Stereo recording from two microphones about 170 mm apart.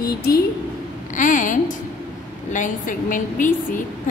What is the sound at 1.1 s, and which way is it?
A woman's voice, 50° left (ahead or behind).